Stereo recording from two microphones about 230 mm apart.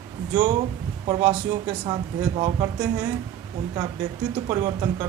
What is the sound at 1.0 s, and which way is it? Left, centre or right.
A man's voice, centre.